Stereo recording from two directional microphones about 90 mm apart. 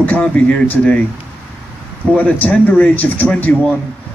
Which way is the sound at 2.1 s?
15° left (ahead or behind).